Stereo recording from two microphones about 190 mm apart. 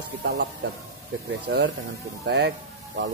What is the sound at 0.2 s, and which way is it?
Speech, 60° right (ahead or behind).